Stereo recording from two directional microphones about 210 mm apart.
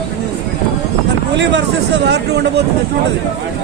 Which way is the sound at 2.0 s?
55° right (ahead or behind).